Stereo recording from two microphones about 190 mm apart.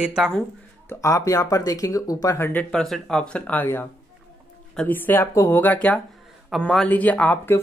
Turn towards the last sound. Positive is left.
turn(degrees=10)  # may be behind; listen again after turning